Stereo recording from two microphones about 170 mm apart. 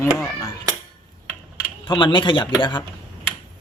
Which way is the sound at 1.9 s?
30° left (ahead or behind).